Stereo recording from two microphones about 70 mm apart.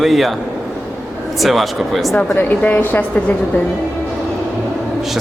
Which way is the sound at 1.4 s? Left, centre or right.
Centre.